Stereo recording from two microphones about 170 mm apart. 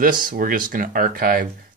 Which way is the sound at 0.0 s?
55° right (ahead or behind).